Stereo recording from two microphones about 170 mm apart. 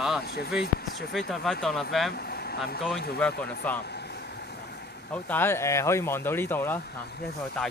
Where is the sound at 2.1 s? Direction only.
70° left (ahead or behind).